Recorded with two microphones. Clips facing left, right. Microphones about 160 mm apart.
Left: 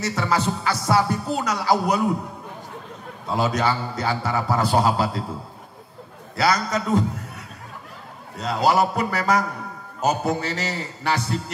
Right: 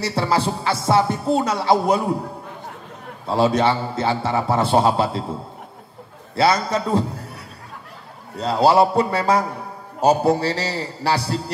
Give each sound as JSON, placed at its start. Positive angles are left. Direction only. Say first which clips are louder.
{"t": 0.0, "sound": "music", "louder": "right 2 dB", "side_deg": -30}
{"t": 3.3, "sound": "music", "louder": "right 5 dB", "side_deg": -30}
{"t": 6.3, "sound": "a man's voice", "louder": "right 3 dB", "side_deg": -30}
{"t": 8.4, "sound": "a man's voice", "louder": "right 4 dB", "side_deg": -30}